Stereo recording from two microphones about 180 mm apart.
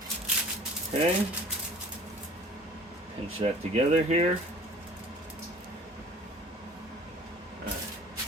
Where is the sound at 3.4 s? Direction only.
35° right (ahead or behind).